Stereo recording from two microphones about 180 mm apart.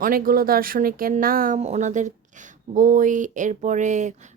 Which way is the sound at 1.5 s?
35° right (ahead or behind).